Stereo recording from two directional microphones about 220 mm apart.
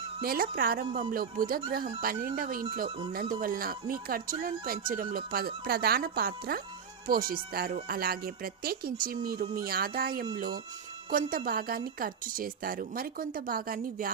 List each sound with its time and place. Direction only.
0.2 s speech: 40° right (ahead or behind)